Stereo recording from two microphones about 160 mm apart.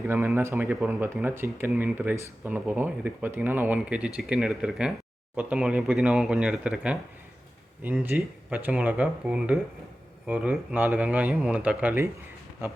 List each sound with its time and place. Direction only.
0.1 s speech: 15° right (ahead or behind)
8.0 s speech: 10° right (ahead or behind)